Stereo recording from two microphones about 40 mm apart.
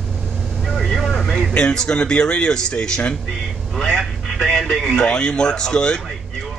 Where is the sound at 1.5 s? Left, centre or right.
Left.